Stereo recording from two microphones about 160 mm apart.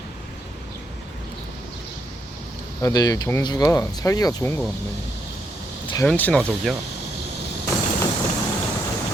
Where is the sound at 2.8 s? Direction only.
25° left (ahead or behind).